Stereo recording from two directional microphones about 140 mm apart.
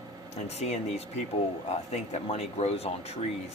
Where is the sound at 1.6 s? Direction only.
50° left (ahead or behind).